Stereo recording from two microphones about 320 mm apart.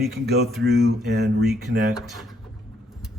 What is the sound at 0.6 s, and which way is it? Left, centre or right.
Speech, right.